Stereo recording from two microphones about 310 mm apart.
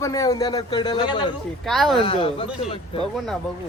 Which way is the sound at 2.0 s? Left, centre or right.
Centre.